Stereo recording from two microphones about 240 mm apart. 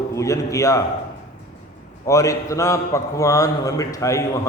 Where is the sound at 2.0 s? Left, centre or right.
Centre.